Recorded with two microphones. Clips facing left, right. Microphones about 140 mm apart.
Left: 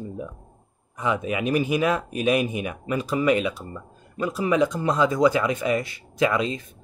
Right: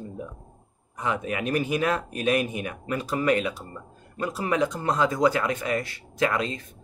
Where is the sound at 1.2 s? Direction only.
10° left (ahead or behind).